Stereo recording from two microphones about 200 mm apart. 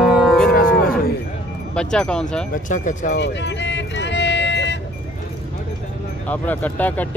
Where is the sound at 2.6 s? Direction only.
40° left (ahead or behind).